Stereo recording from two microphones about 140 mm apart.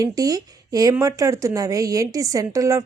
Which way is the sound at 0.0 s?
25° right (ahead or behind).